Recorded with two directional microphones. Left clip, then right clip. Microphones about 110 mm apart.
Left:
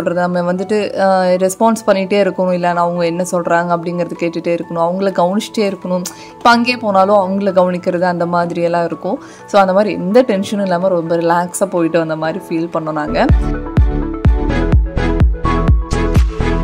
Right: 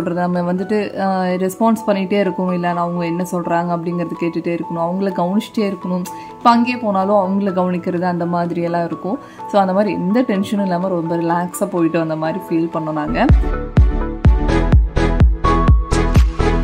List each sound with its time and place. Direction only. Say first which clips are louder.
0.0 s speech: left 4 dB; 35° left (ahead or behind)
6.4 s speech: left 3 dB; 60° left (ahead or behind); by 13.3 s 40° left (ahead or behind)
13.3 s music: left 1 dB; centre (ahead or behind)